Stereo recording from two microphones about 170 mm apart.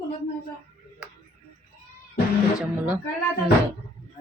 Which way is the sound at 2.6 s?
10° right (ahead or behind).